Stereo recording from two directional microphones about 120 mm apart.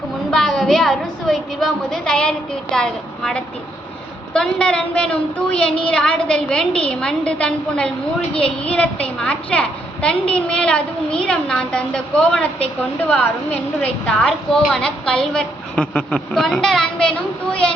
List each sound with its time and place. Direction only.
0.3 s a woman's voice: 5° left (ahead or behind)
8.4 s a woman's voice: 55° left (ahead or behind)
8.7 s a woman's voice: 10° left (ahead or behind)